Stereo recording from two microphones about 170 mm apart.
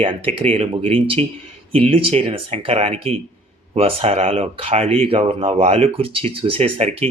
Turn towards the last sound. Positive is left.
turn(degrees=-40)  # may be behind; listen again after turning